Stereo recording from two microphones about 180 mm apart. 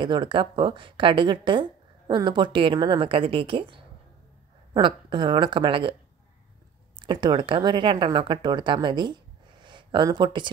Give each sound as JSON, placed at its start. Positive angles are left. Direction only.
{"t": 0.0, "sound": "speech", "side_deg": -25}
{"t": 7.0, "sound": "speech", "side_deg": -25}